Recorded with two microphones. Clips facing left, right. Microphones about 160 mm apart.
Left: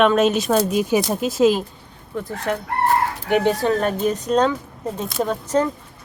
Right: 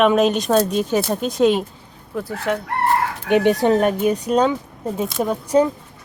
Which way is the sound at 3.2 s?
20° right (ahead or behind).